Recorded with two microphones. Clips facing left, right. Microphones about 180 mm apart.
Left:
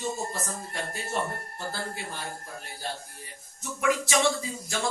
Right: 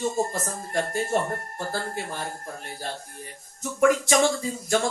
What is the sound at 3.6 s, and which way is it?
Speech, 45° right (ahead or behind).